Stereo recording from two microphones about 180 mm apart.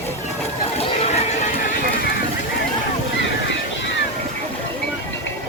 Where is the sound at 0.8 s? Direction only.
35° left (ahead or behind).